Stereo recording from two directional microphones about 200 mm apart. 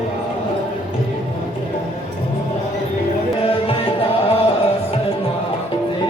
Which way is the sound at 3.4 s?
30° left (ahead or behind).